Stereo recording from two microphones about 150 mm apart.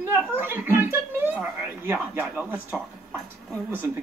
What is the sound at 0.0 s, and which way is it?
Speech, 15° right (ahead or behind).